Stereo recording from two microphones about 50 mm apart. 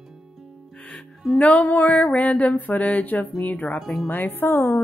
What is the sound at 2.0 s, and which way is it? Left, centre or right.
Music, left.